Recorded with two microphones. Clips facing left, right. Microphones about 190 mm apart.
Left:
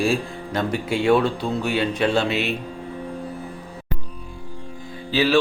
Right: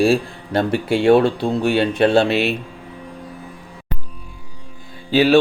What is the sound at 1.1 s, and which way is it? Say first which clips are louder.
Speech: right 5 dB; 30° right (ahead or behind).